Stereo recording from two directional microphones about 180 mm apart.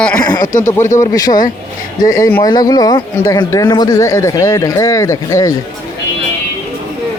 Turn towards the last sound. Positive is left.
turn(degrees=15)  # may be behind; listen again after turning